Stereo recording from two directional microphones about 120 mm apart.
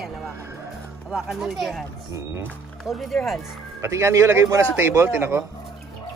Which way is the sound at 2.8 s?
Centre (ahead or behind).